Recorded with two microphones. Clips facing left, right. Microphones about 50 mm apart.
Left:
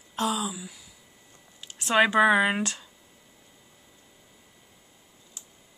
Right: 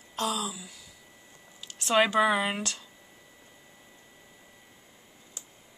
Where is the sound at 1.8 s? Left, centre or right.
Centre.